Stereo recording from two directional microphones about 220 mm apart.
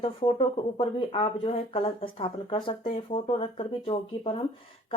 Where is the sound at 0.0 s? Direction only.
25° left (ahead or behind).